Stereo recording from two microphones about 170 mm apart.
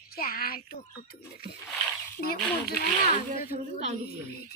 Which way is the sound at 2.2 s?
65° left (ahead or behind).